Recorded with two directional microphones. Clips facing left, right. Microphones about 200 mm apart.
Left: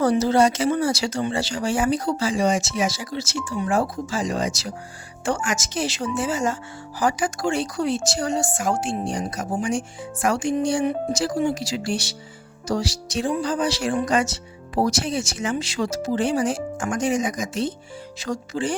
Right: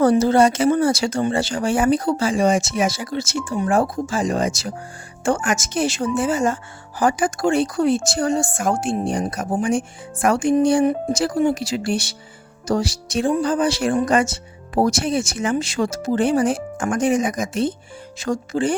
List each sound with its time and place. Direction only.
0.0 s speech: 50° right (ahead or behind)